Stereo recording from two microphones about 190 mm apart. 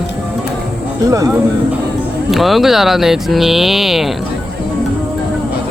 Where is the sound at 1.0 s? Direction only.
15° right (ahead or behind).